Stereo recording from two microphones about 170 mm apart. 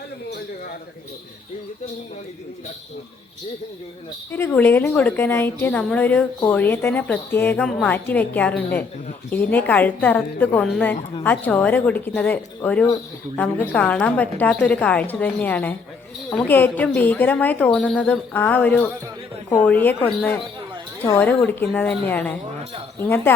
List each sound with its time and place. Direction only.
4.3 s a woman's voice: 10° left (ahead or behind)